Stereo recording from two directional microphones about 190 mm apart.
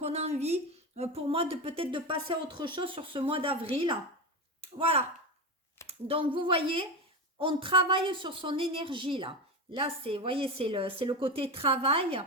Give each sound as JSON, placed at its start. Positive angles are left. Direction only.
{"t": 0.0, "sound": "a woman's voice", "side_deg": -35}